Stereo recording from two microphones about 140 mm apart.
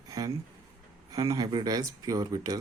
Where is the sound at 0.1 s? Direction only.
25° right (ahead or behind).